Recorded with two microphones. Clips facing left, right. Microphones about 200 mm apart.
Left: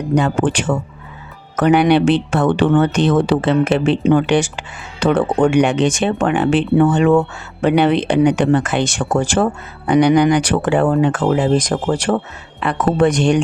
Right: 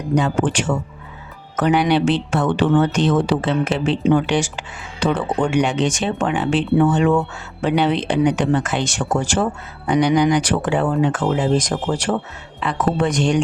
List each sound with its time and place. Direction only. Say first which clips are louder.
0.2 s speech: left 2 dB; 55° left (ahead or behind)